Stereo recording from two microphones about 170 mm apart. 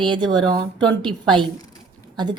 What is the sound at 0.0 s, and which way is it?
A woman's voice, 30° right (ahead or behind).